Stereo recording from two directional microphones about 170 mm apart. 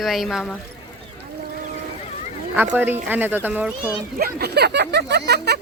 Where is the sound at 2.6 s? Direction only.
10° right (ahead or behind).